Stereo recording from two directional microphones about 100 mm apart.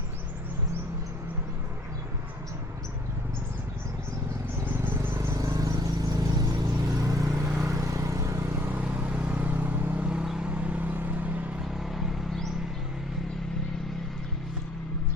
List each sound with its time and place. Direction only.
4.6 s vehicle: 20° right (ahead or behind)
5.4 s vehicle: 35° right (ahead or behind)
8.7 s vehicle: 15° right (ahead or behind)
11.6 s vehicle: centre (ahead or behind)